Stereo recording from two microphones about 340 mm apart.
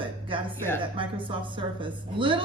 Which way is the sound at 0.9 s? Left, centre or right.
Centre.